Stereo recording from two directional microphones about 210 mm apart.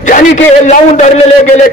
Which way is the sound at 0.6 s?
35° left (ahead or behind).